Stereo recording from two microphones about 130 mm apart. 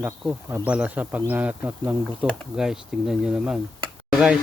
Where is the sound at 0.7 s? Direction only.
10° right (ahead or behind).